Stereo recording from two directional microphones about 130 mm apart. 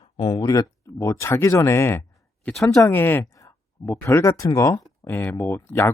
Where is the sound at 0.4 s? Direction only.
30° left (ahead or behind).